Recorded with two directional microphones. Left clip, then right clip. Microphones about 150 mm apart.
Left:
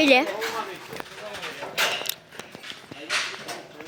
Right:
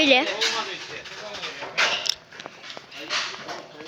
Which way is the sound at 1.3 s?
25° right (ahead or behind).